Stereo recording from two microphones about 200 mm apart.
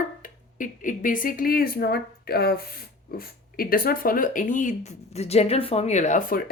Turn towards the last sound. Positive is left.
turn(degrees=35)  # may be behind; listen again after turning